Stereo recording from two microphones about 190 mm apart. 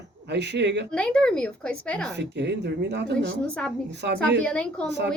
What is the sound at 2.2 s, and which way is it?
Speech, 65° right (ahead or behind).